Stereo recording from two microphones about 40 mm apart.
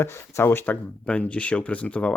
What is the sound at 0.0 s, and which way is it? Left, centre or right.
Speech, left.